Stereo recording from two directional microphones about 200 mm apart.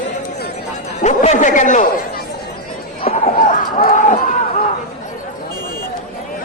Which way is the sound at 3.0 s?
40° left (ahead or behind).